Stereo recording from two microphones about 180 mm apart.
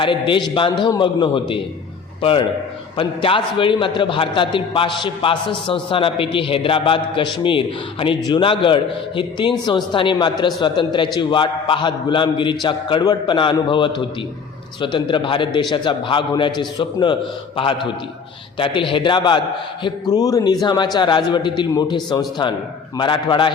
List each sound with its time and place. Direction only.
0.0 s a man's voice: 30° left (ahead or behind)